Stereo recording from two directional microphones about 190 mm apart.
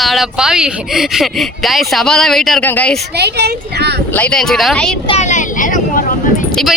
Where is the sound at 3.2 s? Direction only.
60° right (ahead or behind).